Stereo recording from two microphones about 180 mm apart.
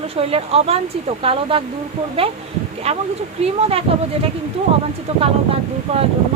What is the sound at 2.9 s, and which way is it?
Speech, 35° right (ahead or behind).